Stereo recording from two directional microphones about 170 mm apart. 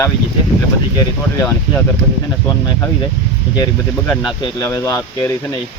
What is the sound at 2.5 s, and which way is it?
Speech, 25° left (ahead or behind).